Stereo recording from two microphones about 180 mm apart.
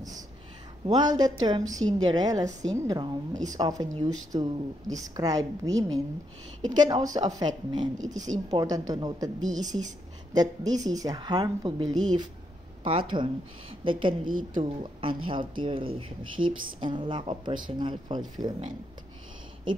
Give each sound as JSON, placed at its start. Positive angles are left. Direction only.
{"t": 0.8, "sound": "a woman's voice", "side_deg": -25}
{"t": 14.2, "sound": "a woman's voice", "side_deg": -50}
{"t": 14.6, "sound": "a woman's voice", "side_deg": -30}